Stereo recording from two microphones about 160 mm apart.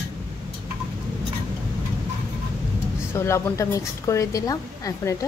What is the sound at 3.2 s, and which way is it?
A woman's voice, 15° left (ahead or behind).